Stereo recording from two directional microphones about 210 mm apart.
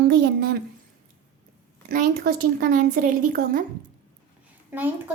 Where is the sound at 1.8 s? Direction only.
45° right (ahead or behind).